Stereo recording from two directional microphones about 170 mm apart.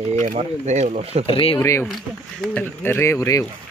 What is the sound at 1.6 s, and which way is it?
Speech, 15° left (ahead or behind).